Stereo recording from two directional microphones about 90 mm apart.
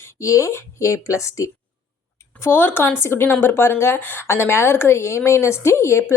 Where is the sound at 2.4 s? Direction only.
25° left (ahead or behind).